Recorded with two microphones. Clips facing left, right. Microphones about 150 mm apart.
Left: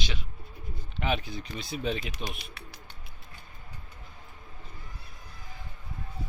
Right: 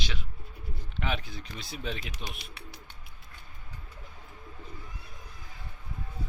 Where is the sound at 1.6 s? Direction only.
Centre (ahead or behind).